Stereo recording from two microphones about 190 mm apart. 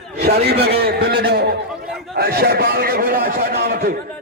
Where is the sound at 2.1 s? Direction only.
55° right (ahead or behind).